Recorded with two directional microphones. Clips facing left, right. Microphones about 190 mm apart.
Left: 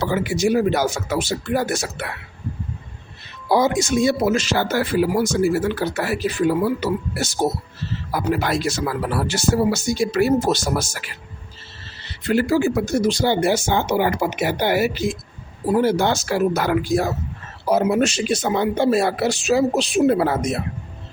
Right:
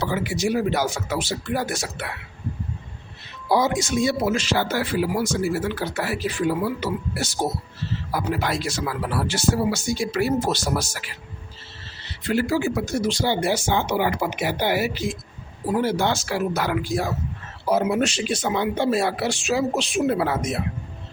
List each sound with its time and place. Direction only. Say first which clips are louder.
0.0 s speech: left 4 dB; 45° left (ahead or behind)
3.5 s speech: left 3 dB; 50° left (ahead or behind)
12.2 s speech: left 4 dB; 50° left (ahead or behind)